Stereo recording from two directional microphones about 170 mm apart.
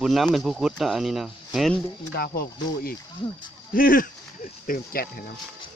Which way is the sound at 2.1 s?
65° left (ahead or behind).